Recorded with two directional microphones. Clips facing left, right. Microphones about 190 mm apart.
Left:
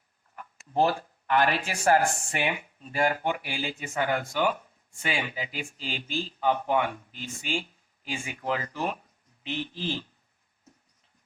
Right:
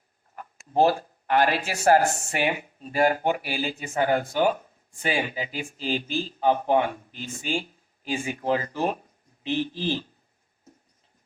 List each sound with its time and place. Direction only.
0.7 s speech: 40° right (ahead or behind)